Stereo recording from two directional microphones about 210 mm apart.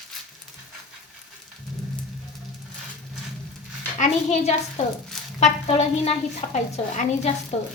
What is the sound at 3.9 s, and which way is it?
A child's voice, 35° left (ahead or behind).